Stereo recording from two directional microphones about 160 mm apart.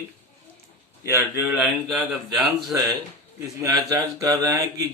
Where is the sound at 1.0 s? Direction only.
15° right (ahead or behind).